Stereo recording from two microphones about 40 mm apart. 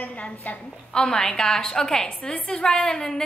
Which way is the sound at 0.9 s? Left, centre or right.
Centre.